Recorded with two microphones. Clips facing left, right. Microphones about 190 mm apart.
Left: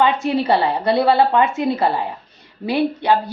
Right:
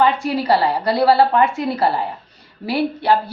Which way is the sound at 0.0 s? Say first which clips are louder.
Even; 25° left (ahead or behind).